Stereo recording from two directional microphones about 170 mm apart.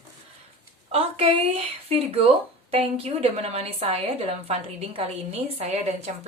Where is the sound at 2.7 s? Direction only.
35° right (ahead or behind).